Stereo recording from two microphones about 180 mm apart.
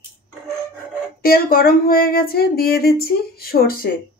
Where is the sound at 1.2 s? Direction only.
55° left (ahead or behind).